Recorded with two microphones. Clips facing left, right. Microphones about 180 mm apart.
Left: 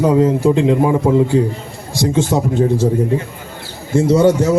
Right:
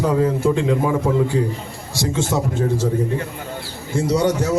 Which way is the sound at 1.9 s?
20° left (ahead or behind).